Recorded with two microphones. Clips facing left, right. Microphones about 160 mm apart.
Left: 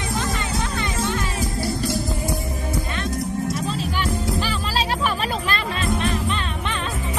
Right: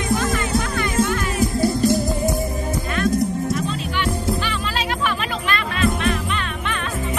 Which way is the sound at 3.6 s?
35° left (ahead or behind).